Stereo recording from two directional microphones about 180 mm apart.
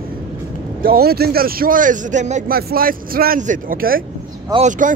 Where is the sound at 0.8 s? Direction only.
60° right (ahead or behind).